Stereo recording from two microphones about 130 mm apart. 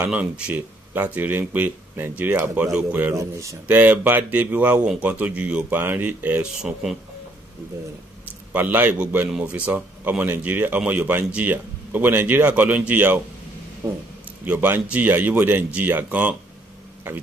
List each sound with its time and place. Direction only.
0.0 s speech: 10° right (ahead or behind)
3.2 s speech: 25° right (ahead or behind)
3.6 s speech: 15° right (ahead or behind)
8.3 s a man's voice: 15° right (ahead or behind)
13.8 s speech: 25° right (ahead or behind)
14.4 s speech: 15° right (ahead or behind)